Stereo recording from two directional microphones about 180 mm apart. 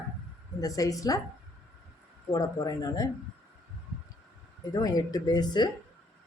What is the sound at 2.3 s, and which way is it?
Speech, 20° left (ahead or behind).